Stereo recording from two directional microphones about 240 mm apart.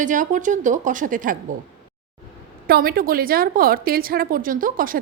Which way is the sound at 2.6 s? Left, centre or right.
Right.